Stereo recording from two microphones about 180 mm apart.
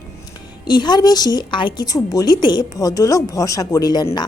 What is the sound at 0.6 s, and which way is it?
A woman's voice, 25° left (ahead or behind).